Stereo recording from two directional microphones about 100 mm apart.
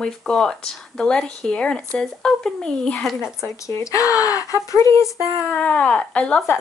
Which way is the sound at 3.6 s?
30° left (ahead or behind).